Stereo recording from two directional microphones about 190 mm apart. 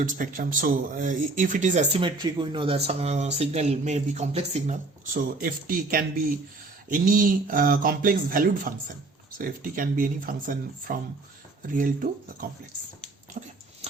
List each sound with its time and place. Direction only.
0.0 s speech: 45° right (ahead or behind)